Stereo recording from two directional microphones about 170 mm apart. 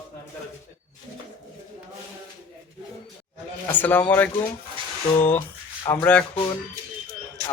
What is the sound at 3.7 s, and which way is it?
Speech, 10° left (ahead or behind).